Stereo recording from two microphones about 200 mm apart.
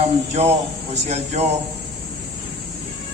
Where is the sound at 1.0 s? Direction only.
35° right (ahead or behind).